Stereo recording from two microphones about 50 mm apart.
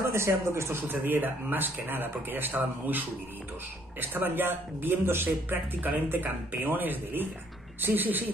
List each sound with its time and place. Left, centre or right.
0.1 s speech: right
0.8 s speech: right